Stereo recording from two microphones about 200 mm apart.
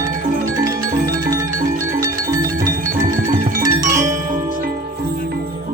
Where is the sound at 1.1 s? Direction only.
15° right (ahead or behind).